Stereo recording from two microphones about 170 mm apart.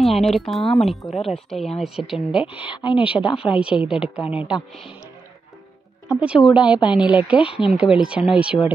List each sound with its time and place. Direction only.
0.0 s a woman's voice: centre (ahead or behind)
2.4 s speech: 30° left (ahead or behind)
2.8 s a woman's voice: 5° right (ahead or behind)
6.0 s a woman's voice: 5° right (ahead or behind)